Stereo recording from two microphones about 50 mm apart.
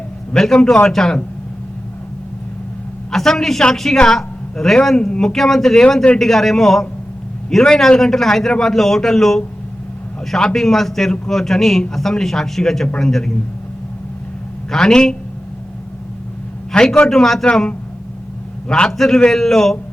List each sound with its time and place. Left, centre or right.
0.3 s a man's voice: centre
3.1 s a man's voice: centre
10.5 s a man's voice: centre
14.7 s a man's voice: centre
16.7 s a man's voice: centre
17.4 s a man's voice: centre